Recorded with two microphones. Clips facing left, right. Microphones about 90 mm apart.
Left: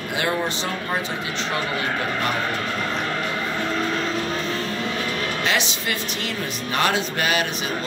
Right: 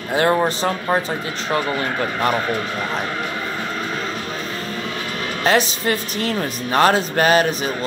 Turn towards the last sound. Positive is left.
turn(degrees=-40)  # may be behind; listen again after turning